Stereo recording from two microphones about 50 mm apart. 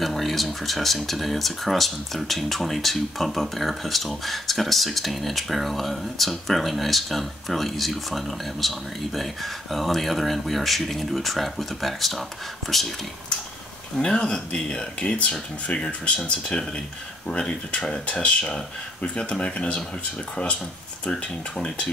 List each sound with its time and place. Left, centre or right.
0.0 s speech: centre
13.9 s speech: centre
16.3 s speech: centre
21.0 s speech: centre